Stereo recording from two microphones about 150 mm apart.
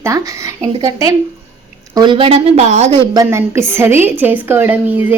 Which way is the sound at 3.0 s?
25° right (ahead or behind).